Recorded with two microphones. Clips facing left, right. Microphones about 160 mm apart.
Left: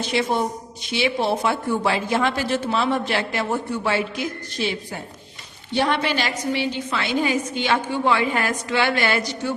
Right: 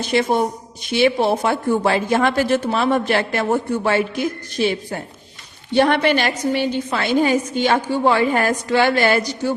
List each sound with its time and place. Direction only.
0.1 s a woman's voice: 50° right (ahead or behind)